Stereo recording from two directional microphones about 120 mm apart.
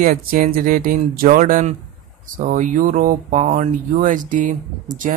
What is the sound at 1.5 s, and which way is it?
Speech, 90° right.